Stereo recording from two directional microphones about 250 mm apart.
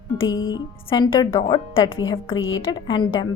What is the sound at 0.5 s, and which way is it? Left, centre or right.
A woman's voice, centre.